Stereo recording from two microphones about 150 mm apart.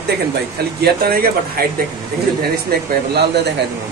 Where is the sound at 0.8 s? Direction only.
90° right.